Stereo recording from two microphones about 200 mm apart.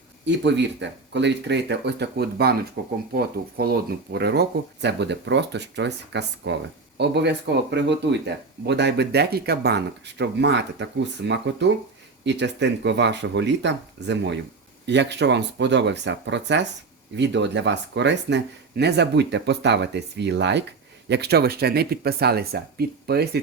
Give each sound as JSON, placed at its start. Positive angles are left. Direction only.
{"t": 0.3, "sound": "speech", "side_deg": -60}